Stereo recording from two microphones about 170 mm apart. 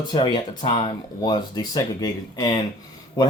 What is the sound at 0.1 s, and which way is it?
Speech, 25° left (ahead or behind).